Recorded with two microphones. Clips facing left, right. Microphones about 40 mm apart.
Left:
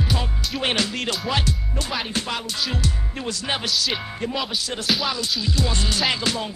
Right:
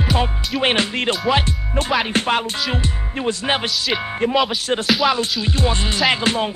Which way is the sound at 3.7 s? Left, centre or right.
Centre.